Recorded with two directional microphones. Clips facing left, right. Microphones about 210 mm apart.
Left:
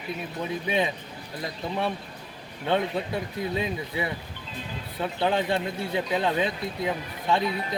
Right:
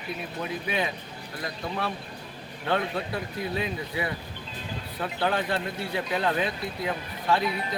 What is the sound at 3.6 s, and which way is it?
Speech, 25° left (ahead or behind).